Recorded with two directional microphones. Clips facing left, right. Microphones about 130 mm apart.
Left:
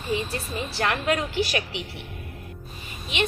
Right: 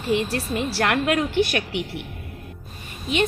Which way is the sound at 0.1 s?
75° right (ahead or behind).